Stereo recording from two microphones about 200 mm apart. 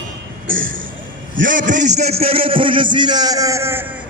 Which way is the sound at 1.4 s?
40° right (ahead or behind).